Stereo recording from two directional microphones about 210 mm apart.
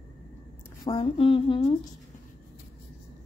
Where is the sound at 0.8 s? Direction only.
25° left (ahead or behind).